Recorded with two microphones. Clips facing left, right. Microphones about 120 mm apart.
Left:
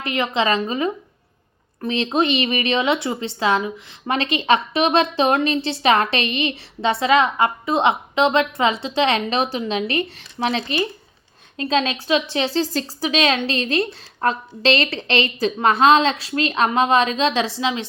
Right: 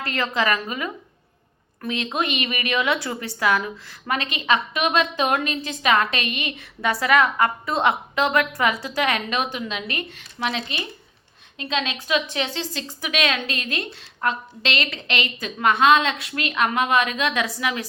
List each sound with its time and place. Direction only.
0.0 s a woman's voice: 20° left (ahead or behind)